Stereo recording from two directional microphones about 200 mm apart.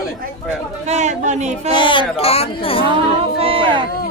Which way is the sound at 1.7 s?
25° left (ahead or behind).